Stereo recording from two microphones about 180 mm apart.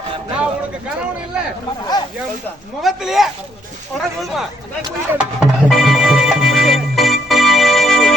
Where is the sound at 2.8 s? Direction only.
Centre (ahead or behind).